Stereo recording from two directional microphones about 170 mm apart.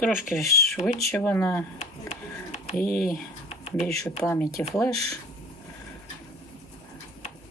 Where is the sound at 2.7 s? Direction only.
55° left (ahead or behind).